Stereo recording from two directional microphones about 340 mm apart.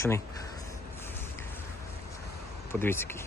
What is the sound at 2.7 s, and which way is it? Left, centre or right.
Speech, centre.